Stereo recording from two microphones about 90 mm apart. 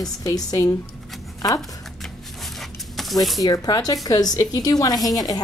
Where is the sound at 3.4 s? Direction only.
45° left (ahead or behind).